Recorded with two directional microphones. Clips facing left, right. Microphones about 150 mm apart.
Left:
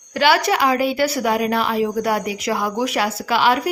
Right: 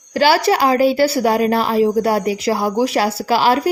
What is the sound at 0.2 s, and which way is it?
A woman's voice, 35° right (ahead or behind).